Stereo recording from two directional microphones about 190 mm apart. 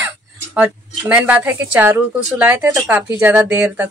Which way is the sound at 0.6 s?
5° right (ahead or behind).